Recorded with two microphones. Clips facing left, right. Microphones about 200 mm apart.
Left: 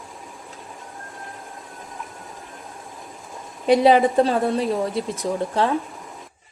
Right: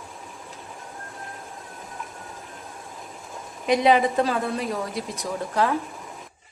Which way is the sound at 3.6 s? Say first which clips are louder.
Left 4 dB; 30° left (ahead or behind).